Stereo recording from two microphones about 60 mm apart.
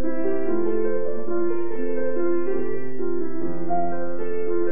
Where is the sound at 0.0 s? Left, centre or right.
Right.